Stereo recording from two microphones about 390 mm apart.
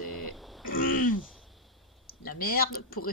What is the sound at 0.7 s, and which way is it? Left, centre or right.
Throat clearing, left.